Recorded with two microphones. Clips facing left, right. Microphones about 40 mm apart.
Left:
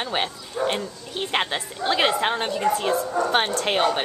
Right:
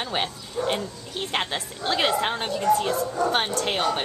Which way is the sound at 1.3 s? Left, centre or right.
Centre.